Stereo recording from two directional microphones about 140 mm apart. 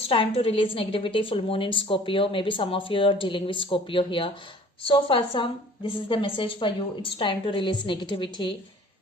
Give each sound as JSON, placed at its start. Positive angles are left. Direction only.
{"t": 0.1, "sound": "a woman's voice", "side_deg": 40}